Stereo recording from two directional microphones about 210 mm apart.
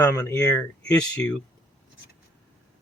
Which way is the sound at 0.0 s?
15° left (ahead or behind).